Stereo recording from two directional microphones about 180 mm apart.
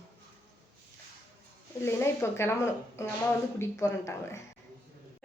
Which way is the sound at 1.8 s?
15° left (ahead or behind).